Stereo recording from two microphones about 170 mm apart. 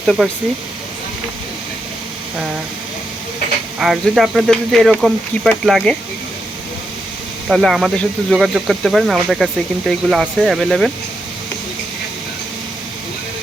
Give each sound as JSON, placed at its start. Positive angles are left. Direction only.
{"t": 0.0, "sound": "speech", "side_deg": 0}
{"t": 3.8, "sound": "speech", "side_deg": 0}
{"t": 7.4, "sound": "speech", "side_deg": 0}